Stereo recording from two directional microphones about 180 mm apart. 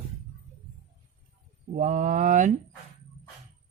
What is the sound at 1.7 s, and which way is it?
Speech, 45° right (ahead or behind).